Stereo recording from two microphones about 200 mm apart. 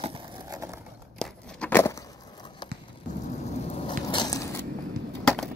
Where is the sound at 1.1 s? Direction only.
5° left (ahead or behind).